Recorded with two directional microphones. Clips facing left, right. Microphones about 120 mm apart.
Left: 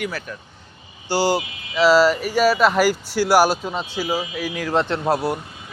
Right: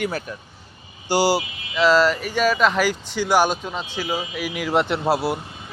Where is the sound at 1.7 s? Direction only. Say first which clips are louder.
Left 2 dB; 5° left (ahead or behind).